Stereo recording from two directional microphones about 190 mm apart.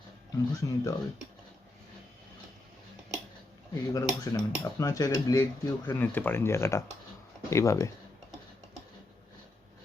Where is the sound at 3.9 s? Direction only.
20° left (ahead or behind).